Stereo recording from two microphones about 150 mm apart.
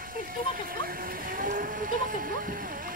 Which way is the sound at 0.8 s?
70° right (ahead or behind).